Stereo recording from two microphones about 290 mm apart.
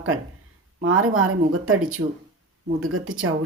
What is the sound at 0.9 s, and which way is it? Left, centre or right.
A woman's voice, right.